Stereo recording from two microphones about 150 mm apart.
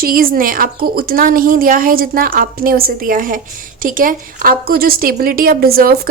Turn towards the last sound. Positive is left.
turn(degrees=-80)